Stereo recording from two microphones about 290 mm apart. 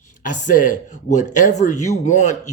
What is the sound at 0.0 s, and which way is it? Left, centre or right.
Speech, left.